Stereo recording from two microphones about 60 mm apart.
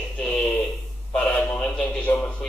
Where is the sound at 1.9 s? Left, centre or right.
Left.